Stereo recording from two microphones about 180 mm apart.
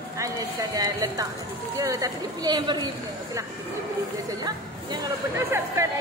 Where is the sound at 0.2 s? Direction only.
20° right (ahead or behind).